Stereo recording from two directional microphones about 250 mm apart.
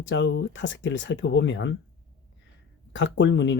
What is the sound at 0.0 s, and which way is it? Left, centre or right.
Speech, left.